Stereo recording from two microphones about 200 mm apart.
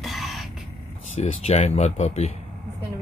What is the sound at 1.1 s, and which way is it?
Speech, 35° left (ahead or behind).